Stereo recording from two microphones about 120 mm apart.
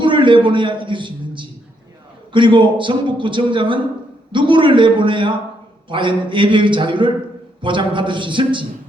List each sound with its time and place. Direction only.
0.0 s a man's voice: 40° right (ahead or behind)